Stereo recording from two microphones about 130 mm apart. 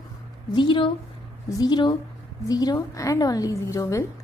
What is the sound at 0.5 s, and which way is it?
A woman's voice, 40° left (ahead or behind).